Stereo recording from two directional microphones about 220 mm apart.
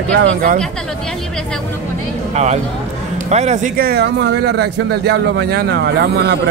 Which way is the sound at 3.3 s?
30° right (ahead or behind).